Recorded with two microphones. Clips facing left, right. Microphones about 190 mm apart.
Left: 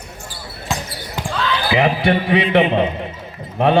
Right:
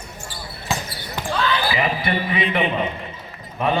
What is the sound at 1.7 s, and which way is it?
A man's voice, 80° left.